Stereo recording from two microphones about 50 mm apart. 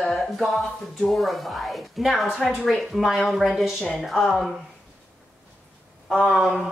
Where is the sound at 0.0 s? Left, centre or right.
Centre.